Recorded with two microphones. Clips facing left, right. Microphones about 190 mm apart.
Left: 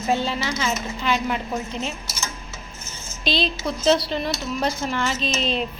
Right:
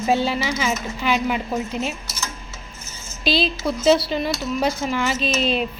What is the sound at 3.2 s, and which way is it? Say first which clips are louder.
Speech: right 3 dB; 5° right (ahead or behind).